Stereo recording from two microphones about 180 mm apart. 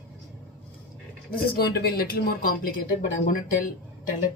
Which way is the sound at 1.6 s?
60° left (ahead or behind).